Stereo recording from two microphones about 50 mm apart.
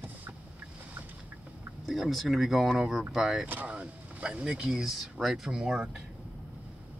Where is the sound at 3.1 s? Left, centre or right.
Centre.